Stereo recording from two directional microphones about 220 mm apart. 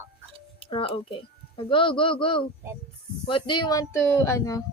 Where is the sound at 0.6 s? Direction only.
25° left (ahead or behind).